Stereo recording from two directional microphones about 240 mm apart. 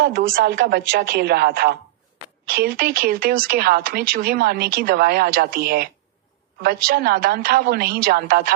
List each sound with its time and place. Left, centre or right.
0.0 s a woman's voice: right